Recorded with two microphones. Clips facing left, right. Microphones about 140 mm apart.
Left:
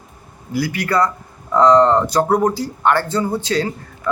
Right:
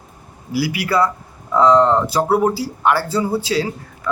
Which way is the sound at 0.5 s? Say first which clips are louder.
Even; 10° right (ahead or behind).